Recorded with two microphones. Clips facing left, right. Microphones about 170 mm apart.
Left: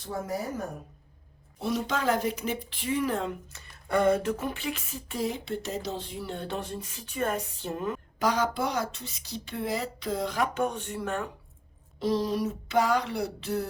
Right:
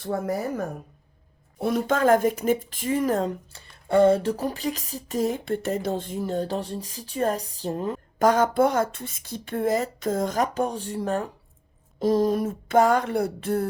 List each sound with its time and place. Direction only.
0.0 s speech: 60° right (ahead or behind); by 3.6 s 40° right (ahead or behind)
3.8 s a sound: 30° right (ahead or behind)
8.2 s speech: 50° right (ahead or behind)
11.9 s speech: 45° right (ahead or behind)